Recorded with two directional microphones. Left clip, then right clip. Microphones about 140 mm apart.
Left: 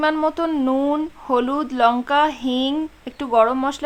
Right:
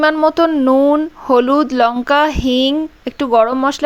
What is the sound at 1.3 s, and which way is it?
Speech, 40° right (ahead or behind).